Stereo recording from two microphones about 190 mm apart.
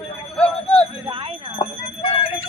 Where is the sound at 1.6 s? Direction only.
30° left (ahead or behind).